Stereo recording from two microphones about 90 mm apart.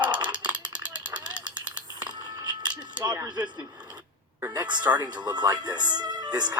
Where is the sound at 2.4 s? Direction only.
55° right (ahead or behind).